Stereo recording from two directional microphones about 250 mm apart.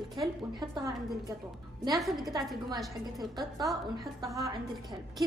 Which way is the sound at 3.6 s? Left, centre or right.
Centre.